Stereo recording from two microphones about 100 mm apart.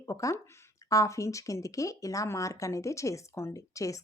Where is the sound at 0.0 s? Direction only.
30° left (ahead or behind).